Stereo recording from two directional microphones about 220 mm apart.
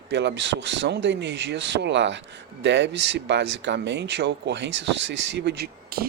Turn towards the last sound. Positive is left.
turn(degrees=-45)  # may be behind; listen again after turning